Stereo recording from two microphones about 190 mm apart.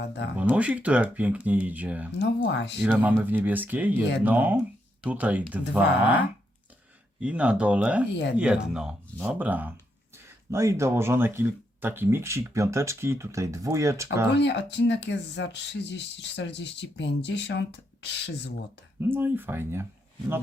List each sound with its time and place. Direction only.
0.0 s speech: 60° left (ahead or behind)
0.3 s speech: 5° right (ahead or behind)
2.1 s speech: 65° left (ahead or behind)
2.8 s speech: 10° right (ahead or behind)
8.1 s speech: 65° left (ahead or behind)
8.4 s speech: 5° right (ahead or behind)
14.3 s speech: 65° left (ahead or behind)
19.0 s speech: 10° right (ahead or behind)